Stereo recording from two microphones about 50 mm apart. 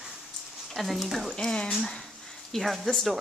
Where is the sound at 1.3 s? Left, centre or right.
Centre.